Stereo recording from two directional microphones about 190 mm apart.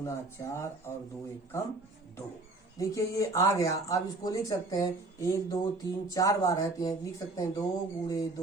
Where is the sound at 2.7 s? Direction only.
15° left (ahead or behind).